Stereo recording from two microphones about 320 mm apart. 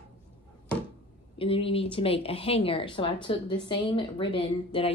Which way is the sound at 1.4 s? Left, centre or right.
Centre.